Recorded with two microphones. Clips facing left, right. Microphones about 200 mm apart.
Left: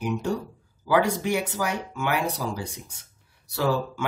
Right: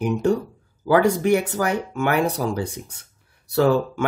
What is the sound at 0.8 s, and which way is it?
Speech, 50° right (ahead or behind).